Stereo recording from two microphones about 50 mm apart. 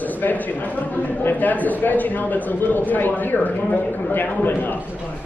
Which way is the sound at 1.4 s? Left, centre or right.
Left.